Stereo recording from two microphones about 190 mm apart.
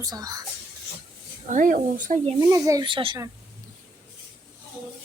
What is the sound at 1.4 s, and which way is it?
Speech, 45° right (ahead or behind).